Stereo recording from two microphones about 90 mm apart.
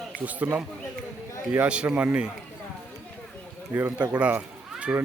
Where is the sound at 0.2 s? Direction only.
20° right (ahead or behind).